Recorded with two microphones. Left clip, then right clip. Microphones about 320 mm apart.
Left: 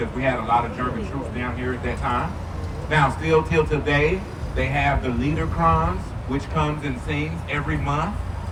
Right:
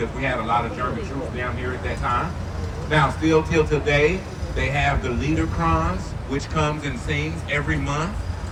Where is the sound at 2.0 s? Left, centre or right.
Left.